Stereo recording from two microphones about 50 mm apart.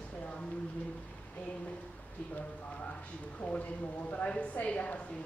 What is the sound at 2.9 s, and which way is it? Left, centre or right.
A woman's voice, left.